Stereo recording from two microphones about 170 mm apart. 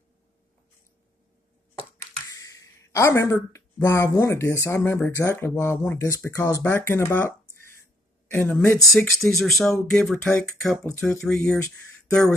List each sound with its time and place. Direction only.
2.3 s speech: 20° left (ahead or behind)